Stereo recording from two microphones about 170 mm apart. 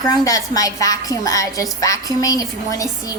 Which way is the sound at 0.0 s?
20° left (ahead or behind).